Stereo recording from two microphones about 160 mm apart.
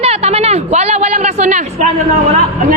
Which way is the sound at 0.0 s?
40° right (ahead or behind).